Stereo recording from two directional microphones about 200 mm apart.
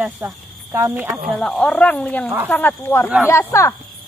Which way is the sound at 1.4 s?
5° left (ahead or behind).